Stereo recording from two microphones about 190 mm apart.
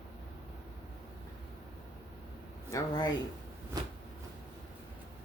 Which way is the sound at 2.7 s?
20° left (ahead or behind).